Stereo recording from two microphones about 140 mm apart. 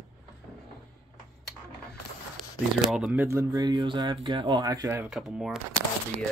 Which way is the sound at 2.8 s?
Centre (ahead or behind).